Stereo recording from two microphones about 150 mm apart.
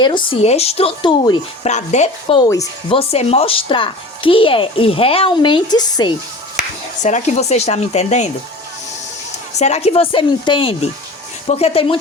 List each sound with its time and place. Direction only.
0.3 s speech: 45° left (ahead or behind)
1.6 s speech: 50° left (ahead or behind)
2.3 s speech: 25° left (ahead or behind)
2.9 s speech: 40° left (ahead or behind)
7.0 s speech: 55° left (ahead or behind)
9.6 s speech: 45° left (ahead or behind)